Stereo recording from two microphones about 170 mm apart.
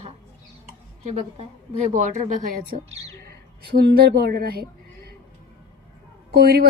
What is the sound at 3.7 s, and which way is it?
Speech, 65° right (ahead or behind).